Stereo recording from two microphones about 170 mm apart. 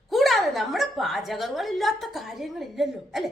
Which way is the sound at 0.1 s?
Centre (ahead or behind).